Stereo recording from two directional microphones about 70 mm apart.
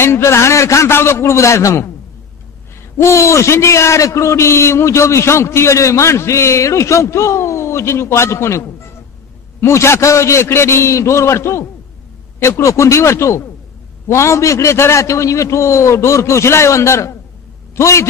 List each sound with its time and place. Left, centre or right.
0.0 s a man's voice: left
3.0 s a man's voice: left